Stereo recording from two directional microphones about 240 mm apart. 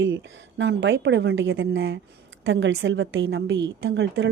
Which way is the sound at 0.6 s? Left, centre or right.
Right.